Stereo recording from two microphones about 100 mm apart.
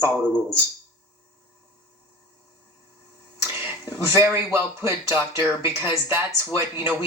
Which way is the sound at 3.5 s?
25° right (ahead or behind).